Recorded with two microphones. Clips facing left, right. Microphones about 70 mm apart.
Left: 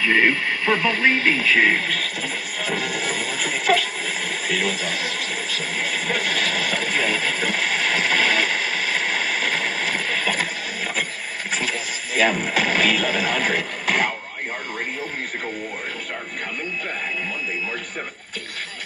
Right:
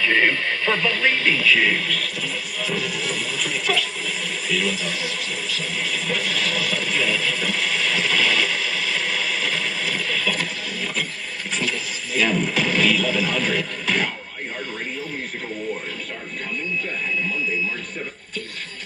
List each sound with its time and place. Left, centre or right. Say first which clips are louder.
0.0 s speech: left 1 dB; centre; by 10.4 s left
12.1 s speech: left 1 dB; left